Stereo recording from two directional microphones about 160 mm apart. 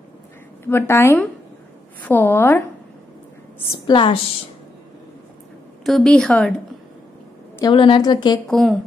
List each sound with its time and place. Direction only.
0.7 s a woman's voice: 15° left (ahead or behind)
3.8 s a woman's voice: 30° left (ahead or behind)
5.9 s speech: centre (ahead or behind)
7.6 s a woman's voice: 30° left (ahead or behind)
8.5 s speech: centre (ahead or behind)